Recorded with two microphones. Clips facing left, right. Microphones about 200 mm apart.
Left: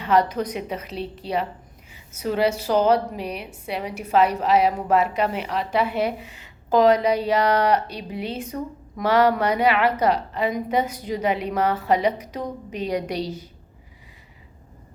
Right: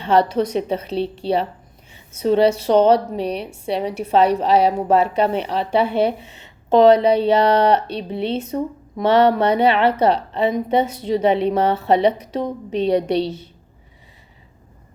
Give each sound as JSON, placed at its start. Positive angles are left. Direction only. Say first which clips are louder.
{"t": 0.0, "sound": "a woman's voice", "louder": "right 4 dB", "side_deg": -30}